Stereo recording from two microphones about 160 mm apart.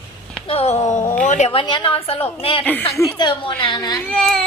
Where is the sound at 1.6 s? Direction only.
30° left (ahead or behind).